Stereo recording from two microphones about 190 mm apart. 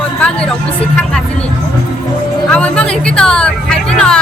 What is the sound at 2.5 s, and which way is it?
Speech, 5° left (ahead or behind).